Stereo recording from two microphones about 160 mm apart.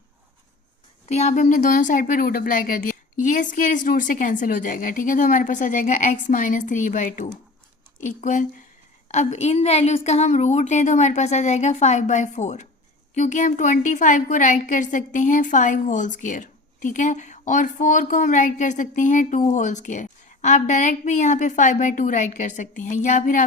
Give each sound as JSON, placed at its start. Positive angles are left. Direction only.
{"t": 1.0, "sound": "a woman's voice", "side_deg": 45}